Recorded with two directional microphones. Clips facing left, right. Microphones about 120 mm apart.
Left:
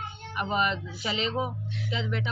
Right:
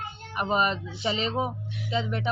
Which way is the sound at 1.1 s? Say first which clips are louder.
Left 1 dB; 40° right (ahead or behind).